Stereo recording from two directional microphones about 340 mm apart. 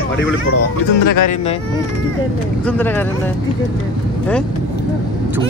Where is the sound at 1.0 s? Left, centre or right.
Left.